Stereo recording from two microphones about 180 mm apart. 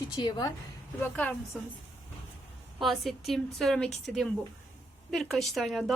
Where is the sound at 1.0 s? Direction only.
10° left (ahead or behind).